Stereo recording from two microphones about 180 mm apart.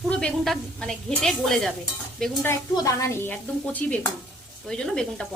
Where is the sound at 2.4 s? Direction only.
20° left (ahead or behind).